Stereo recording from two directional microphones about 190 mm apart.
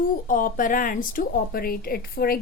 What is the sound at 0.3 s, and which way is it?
A woman's voice, 45° left (ahead or behind).